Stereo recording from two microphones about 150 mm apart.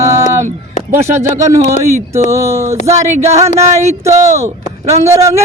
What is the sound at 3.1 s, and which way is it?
Speech, 45° right (ahead or behind).